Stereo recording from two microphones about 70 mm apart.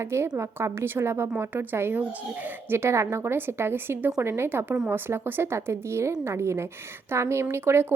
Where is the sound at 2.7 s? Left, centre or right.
Right.